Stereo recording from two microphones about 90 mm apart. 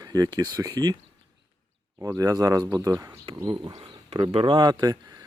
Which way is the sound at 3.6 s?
55° right (ahead or behind).